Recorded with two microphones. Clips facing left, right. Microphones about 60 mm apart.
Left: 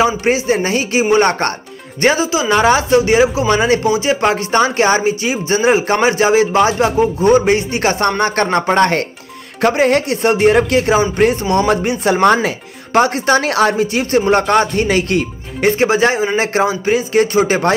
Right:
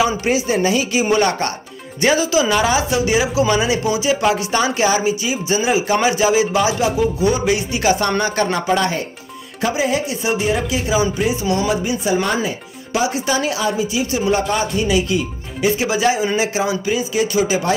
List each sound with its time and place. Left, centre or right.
0.2 s a man's voice: left